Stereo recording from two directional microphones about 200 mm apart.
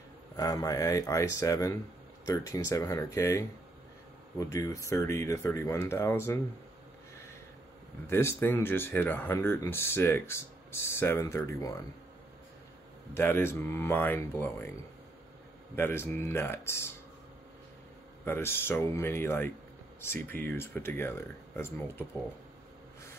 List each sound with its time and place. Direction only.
0.4 s speech: 20° left (ahead or behind)
8.1 s speech: 10° left (ahead or behind)
13.1 s speech: 10° left (ahead or behind)
15.7 s speech: 10° left (ahead or behind)
18.2 s speech: 10° left (ahead or behind)